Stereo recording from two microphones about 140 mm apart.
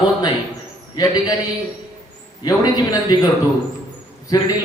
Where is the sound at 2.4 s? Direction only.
30° left (ahead or behind).